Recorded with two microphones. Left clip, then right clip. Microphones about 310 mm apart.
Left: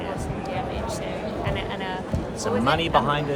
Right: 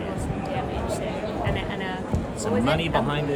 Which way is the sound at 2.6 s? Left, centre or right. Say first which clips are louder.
Left 4 dB; centre.